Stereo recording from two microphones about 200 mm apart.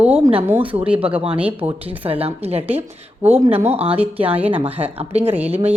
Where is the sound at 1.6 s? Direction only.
30° right (ahead or behind).